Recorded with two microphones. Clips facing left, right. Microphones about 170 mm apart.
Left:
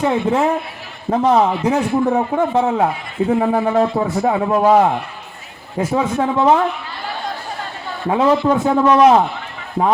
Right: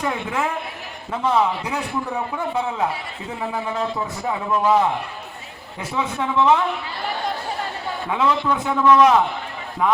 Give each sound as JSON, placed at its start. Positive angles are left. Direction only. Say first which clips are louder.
{"t": 0.0, "sound": "a man's voice", "louder": "left 8 dB", "side_deg": 30}
{"t": 2.0, "sound": "a man's voice", "louder": "left 9 dB", "side_deg": 55}
{"t": 6.0, "sound": "a man's voice", "louder": "left 2 dB", "side_deg": 40}
{"t": 8.1, "sound": "a man's voice", "louder": "left 7 dB", "side_deg": 35}